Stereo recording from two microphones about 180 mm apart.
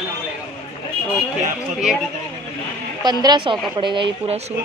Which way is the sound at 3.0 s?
25° right (ahead or behind).